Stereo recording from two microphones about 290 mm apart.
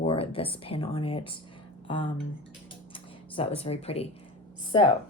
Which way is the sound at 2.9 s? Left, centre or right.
Centre.